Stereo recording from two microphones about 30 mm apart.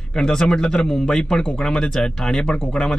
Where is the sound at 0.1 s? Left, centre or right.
Left.